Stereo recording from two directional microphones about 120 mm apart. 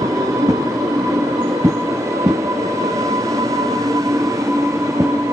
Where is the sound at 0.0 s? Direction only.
25° right (ahead or behind).